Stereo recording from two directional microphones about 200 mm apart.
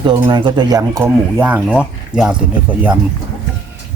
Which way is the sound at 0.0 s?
20° right (ahead or behind).